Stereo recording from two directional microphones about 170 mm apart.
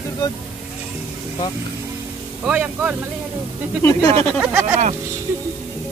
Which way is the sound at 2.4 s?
5° right (ahead or behind).